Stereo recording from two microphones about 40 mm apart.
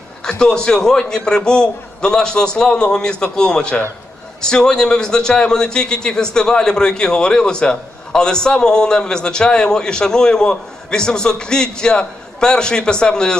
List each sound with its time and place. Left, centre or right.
0.3 s a man's voice: centre